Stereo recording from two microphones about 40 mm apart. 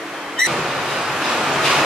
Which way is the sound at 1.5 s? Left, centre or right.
Centre.